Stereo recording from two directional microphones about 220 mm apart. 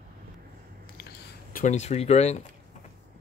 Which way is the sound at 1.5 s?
35° left (ahead or behind).